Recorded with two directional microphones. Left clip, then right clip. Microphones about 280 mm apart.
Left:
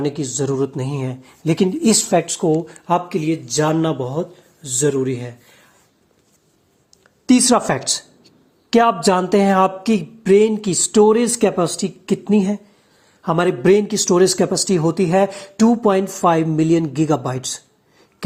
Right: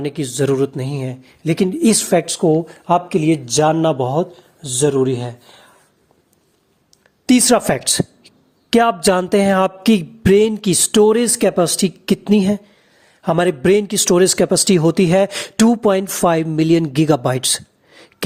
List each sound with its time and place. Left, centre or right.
0.1 s speech: right
2.0 s speech: right
7.3 s a woman's voice: right